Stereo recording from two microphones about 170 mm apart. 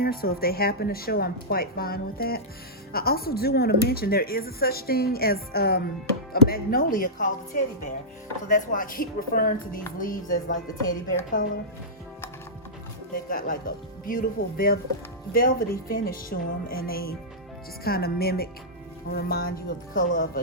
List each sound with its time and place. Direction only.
0.0 s speech: 60° left (ahead or behind)
13.1 s speech: 55° left (ahead or behind)